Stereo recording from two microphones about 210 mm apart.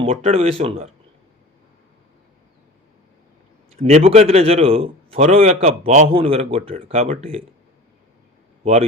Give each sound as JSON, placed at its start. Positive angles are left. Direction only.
{"t": 0.0, "sound": "a man's voice", "side_deg": -30}
{"t": 3.8, "sound": "a man's voice", "side_deg": -30}